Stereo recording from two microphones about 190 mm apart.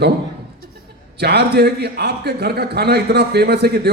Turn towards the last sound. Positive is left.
turn(degrees=-55)  # may be behind; listen again after turning